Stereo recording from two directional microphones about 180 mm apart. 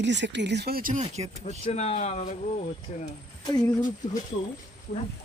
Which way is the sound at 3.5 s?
20° left (ahead or behind).